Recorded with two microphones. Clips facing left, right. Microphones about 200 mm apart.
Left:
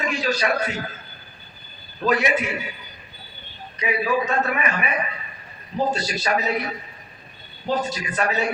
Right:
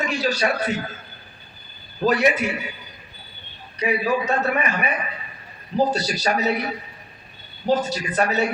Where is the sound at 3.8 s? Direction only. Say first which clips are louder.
Right 1 dB; 35° right (ahead or behind).